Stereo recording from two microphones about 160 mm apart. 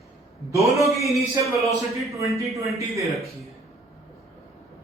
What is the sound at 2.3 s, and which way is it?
Speech, 20° right (ahead or behind).